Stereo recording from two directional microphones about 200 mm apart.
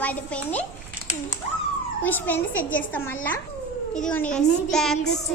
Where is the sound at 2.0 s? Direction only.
10° left (ahead or behind).